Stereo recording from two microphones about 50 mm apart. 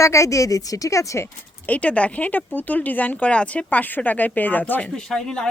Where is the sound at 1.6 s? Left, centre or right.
Left.